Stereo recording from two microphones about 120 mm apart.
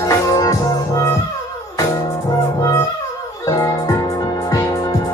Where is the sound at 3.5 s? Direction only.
30° left (ahead or behind).